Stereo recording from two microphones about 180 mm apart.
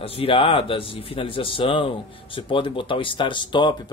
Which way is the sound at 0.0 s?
30° left (ahead or behind).